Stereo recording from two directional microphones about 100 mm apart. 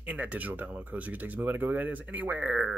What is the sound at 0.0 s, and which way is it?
Speech, 15° right (ahead or behind).